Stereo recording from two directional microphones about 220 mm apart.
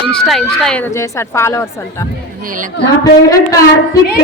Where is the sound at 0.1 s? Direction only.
Centre (ahead or behind).